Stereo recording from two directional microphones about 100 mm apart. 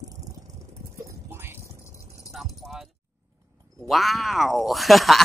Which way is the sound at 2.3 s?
Centre (ahead or behind).